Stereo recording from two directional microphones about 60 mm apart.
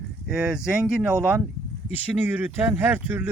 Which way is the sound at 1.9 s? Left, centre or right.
Right.